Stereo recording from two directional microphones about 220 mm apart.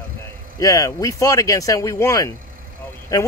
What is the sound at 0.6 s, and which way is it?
Speech, 15° left (ahead or behind).